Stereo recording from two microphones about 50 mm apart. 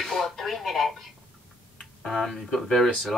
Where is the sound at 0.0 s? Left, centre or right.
Centre.